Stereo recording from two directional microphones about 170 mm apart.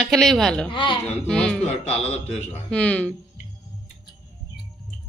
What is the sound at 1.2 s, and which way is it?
Speech, 5° left (ahead or behind).